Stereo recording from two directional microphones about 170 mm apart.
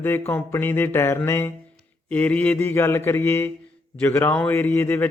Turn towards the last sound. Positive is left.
turn(degrees=10)  # may be behind; listen again after turning